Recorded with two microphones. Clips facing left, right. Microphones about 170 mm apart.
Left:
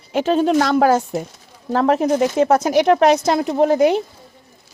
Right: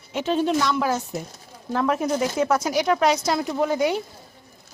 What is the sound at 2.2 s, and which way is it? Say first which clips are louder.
Speech: left 6 dB; 55° left (ahead or behind).